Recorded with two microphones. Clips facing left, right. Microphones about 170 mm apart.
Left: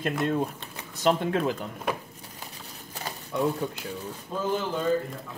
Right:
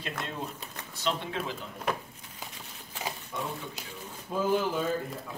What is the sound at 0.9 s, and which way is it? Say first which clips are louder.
Speech: left 8 dB; 50° left (ahead or behind).